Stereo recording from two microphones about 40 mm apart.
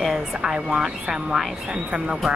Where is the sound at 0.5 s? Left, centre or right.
Right.